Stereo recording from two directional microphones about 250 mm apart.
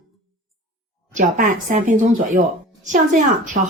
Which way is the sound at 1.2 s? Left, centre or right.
Right.